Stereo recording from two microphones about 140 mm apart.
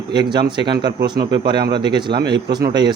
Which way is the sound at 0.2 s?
35° right (ahead or behind).